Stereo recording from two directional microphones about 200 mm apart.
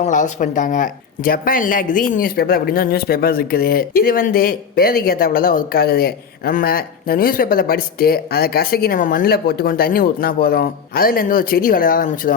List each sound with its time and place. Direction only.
0.0 s speech: 40° left (ahead or behind)